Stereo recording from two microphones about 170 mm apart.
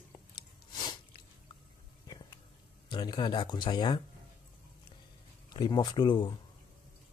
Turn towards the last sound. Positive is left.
turn(degrees=25)  # may be behind; listen again after turning